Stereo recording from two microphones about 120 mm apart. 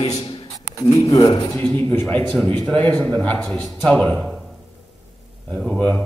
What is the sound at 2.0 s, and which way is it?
A man's voice, 5° left (ahead or behind).